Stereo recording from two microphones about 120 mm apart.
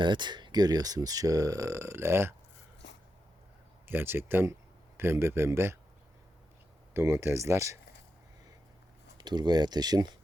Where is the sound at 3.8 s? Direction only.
20° right (ahead or behind).